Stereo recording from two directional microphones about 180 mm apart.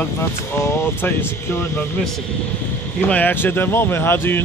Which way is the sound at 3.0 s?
10° left (ahead or behind).